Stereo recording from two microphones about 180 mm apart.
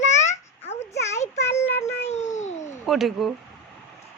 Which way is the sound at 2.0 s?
40° left (ahead or behind).